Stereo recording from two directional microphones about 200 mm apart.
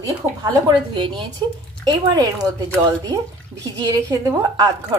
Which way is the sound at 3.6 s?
15° right (ahead or behind).